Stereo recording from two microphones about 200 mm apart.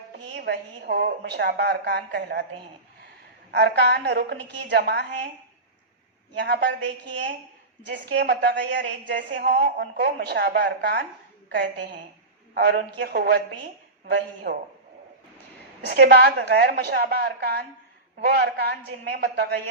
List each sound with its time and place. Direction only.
0.3 s a woman's voice: 55° right (ahead or behind)
3.5 s a woman's voice: 55° right (ahead or behind)
6.4 s a woman's voice: 60° right (ahead or behind)
7.9 s a woman's voice: 50° right (ahead or behind)
9.1 s a woman's voice: 50° right (ahead or behind)
15.9 s a woman's voice: 55° right (ahead or behind)